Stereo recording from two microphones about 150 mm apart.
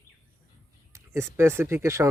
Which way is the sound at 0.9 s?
20° right (ahead or behind).